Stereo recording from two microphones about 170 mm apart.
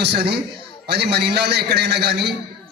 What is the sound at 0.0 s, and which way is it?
A man's voice, 75° right (ahead or behind).